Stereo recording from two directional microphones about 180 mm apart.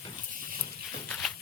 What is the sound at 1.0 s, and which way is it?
Walk, 5° left (ahead or behind).